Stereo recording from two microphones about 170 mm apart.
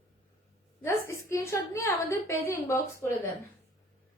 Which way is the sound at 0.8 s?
15° left (ahead or behind).